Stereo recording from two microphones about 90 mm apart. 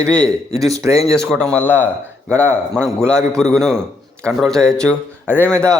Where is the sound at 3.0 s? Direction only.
30° right (ahead or behind).